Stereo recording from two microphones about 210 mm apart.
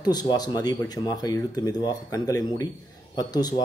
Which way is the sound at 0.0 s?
20° left (ahead or behind).